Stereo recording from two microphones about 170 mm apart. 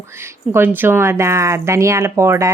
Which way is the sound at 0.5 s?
10° right (ahead or behind).